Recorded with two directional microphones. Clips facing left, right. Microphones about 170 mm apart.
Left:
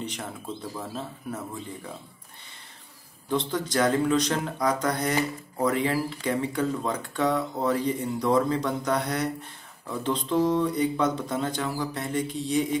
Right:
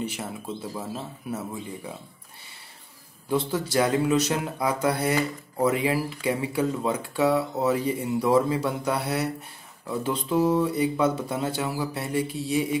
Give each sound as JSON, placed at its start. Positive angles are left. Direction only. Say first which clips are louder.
{"t": 0.0, "sound": "speech", "louder": "right 3 dB", "side_deg": -5}
{"t": 3.3, "sound": "speech", "louder": "right 2 dB", "side_deg": -10}